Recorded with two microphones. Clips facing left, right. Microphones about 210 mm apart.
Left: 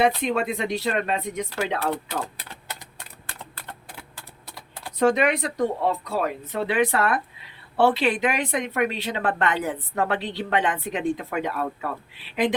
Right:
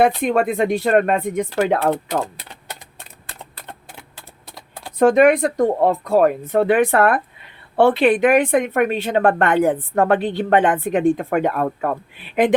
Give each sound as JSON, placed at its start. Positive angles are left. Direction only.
{"t": 0.2, "sound": "speech", "side_deg": -50}
{"t": 4.5, "sound": "typing", "side_deg": -25}
{"t": 4.9, "sound": "speech", "side_deg": -50}